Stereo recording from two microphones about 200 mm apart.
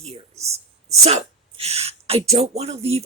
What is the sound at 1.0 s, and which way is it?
Speech, 30° right (ahead or behind).